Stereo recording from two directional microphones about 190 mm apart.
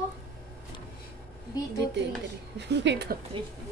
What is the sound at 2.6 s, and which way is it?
Speech, 65° right (ahead or behind).